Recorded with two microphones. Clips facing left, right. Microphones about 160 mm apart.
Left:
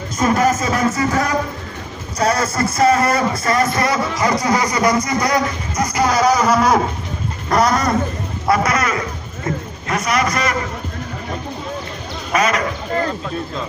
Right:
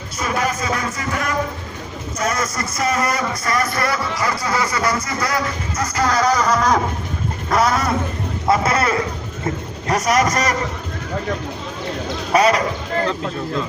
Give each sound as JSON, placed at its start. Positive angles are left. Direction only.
{"t": 0.2, "sound": "music", "side_deg": 40}
{"t": 2.1, "sound": "speech", "side_deg": 35}
{"t": 7.5, "sound": "speech", "side_deg": 0}
{"t": 8.4, "sound": "speech", "side_deg": -30}
{"t": 9.9, "sound": "a man's voice", "side_deg": -40}
{"t": 12.3, "sound": "a man's voice", "side_deg": -35}